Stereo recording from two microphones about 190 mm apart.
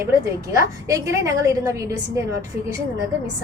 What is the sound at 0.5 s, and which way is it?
A woman's voice, 15° right (ahead or behind).